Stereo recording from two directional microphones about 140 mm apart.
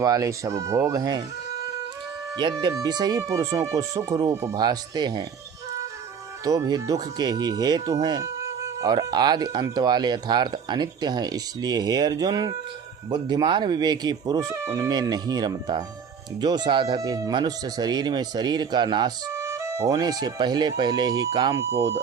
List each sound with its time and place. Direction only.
0.0 s speech: 25° right (ahead or behind)
2.3 s speech: 35° right (ahead or behind)
6.4 s speech: 25° right (ahead or behind)
19.3 s speech: 20° right (ahead or behind)